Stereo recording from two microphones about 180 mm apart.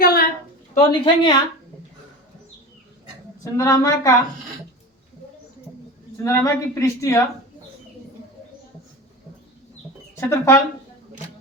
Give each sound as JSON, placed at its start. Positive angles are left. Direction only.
{"t": 0.0, "sound": "a sound", "side_deg": 60}
{"t": 0.9, "sound": "a woman's voice", "side_deg": 25}
{"t": 3.4, "sound": "a woman's voice", "side_deg": 20}
{"t": 6.2, "sound": "speech", "side_deg": 15}
{"t": 10.2, "sound": "speech", "side_deg": 15}